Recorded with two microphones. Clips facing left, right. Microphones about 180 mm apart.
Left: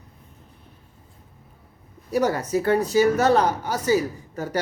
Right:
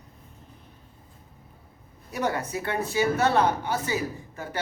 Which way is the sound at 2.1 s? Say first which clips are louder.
Left 7 dB; 40° left (ahead or behind).